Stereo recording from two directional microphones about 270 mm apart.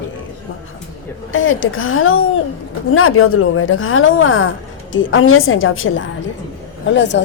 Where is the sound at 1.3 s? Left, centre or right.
Left.